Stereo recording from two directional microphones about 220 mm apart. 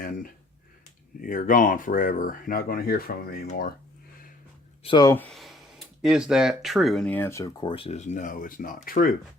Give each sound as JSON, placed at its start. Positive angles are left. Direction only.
{"t": 0.0, "sound": "speech", "side_deg": 40}
{"t": 4.8, "sound": "speech", "side_deg": 20}